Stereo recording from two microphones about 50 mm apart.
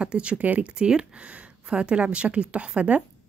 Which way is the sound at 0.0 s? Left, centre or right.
Right.